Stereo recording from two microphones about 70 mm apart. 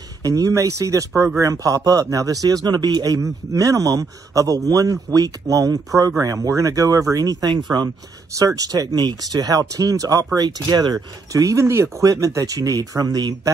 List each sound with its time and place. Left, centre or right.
0.2 s speech: right
11.4 s speech: right